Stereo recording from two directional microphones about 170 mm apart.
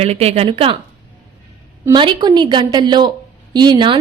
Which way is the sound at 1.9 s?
30° right (ahead or behind).